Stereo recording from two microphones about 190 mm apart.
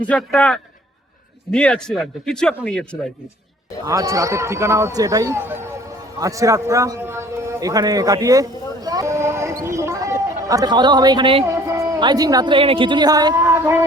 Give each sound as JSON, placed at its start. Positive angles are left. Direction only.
{"t": 0.1, "sound": "a man's voice", "side_deg": 5}
{"t": 3.8, "sound": "speech", "side_deg": -15}
{"t": 6.1, "sound": "a sound", "side_deg": -15}
{"t": 11.7, "sound": "speech", "side_deg": -20}